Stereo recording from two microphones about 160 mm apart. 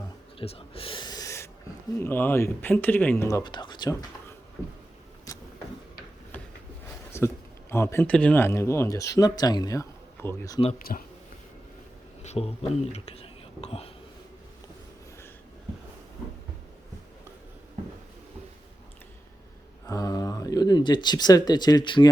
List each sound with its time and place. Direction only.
0.3 s owl: 35° left (ahead or behind); by 1.5 s 20° left (ahead or behind)
2.0 s speech: 10° left (ahead or behind); by 3.9 s 25° left (ahead or behind)
5.3 s vehicle: 20° left (ahead or behind)
6.3 s a sound: 10° left (ahead or behind)
7.1 s speech: 15° left (ahead or behind)
10.8 s speech: 60° left (ahead or behind)
12.2 s speech: 40° left (ahead or behind)
19.9 s speech: 25° left (ahead or behind)